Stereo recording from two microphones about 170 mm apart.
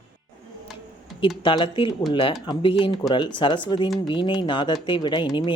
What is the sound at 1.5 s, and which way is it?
Speech, 30° left (ahead or behind).